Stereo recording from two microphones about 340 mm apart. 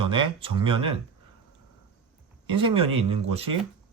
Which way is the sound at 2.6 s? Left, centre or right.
Centre.